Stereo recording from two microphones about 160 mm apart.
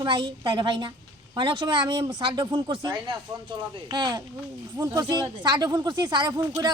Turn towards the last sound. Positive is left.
turn(degrees=-25)  # may be behind; listen again after turning